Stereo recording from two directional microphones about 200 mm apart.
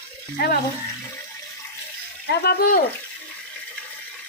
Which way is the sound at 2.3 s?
55° left (ahead or behind).